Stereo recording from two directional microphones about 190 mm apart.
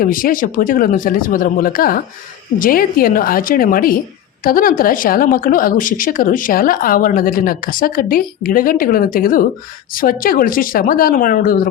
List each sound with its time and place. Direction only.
0.0 s a woman's voice: 45° left (ahead or behind)